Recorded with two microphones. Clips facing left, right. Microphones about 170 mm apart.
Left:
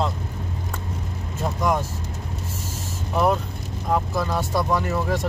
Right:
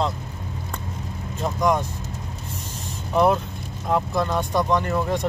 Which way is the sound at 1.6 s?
5° left (ahead or behind).